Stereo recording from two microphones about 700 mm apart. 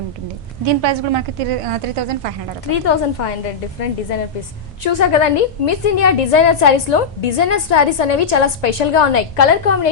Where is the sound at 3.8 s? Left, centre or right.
Left.